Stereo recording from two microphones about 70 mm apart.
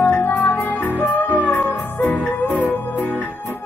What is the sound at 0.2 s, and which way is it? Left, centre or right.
Music, left.